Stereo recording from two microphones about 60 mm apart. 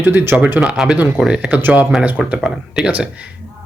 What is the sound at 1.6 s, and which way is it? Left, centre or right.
Speech, right.